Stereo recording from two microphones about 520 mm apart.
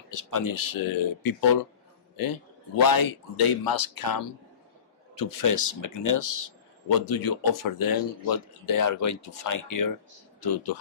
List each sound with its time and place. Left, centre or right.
0.1 s speech: left
2.8 s speech: left